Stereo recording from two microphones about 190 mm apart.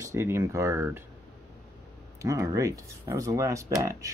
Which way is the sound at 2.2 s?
15° right (ahead or behind).